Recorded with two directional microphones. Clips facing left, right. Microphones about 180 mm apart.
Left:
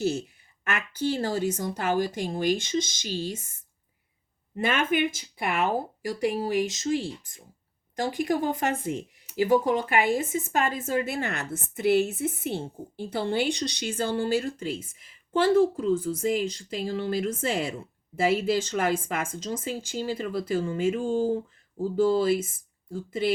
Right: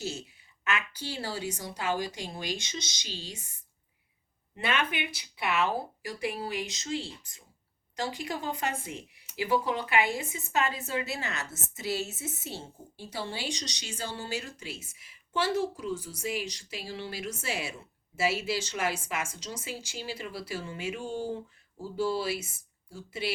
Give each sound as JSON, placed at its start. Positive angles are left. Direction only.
{"t": 0.6, "sound": "speech", "side_deg": 50}
{"t": 4.5, "sound": "speech", "side_deg": 45}